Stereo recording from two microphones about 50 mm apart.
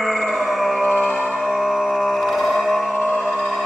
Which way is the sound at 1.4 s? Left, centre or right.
Centre.